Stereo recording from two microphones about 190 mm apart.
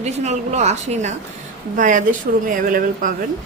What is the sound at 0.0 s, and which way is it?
A woman's voice, 35° right (ahead or behind).